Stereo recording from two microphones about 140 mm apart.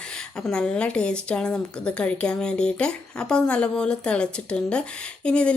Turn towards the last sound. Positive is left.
turn(degrees=10)  # may be behind; listen again after turning